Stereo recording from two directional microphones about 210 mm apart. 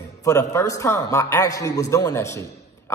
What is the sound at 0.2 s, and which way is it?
A man's voice, 15° left (ahead or behind).